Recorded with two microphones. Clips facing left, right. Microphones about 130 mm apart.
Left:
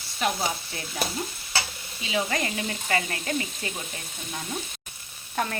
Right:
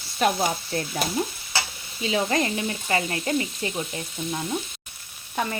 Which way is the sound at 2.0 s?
35° right (ahead or behind).